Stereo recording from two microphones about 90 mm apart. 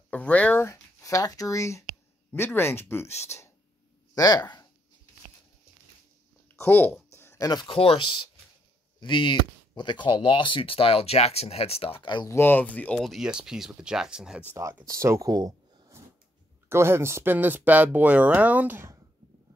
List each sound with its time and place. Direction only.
0.1 s speech: 15° left (ahead or behind)
0.7 s speech: 35° left (ahead or behind)
4.1 s speech: 45° left (ahead or behind)
6.5 s speech: 25° left (ahead or behind)
7.1 s a sound: 30° left (ahead or behind)
7.6 s speech: 90° left; by 12.3 s 60° left (ahead or behind)
12.3 s speech: 25° left (ahead or behind)
13.0 s speech: centre (ahead or behind)
14.9 s speech: 35° right (ahead or behind)
16.6 s speech: 25° right (ahead or behind)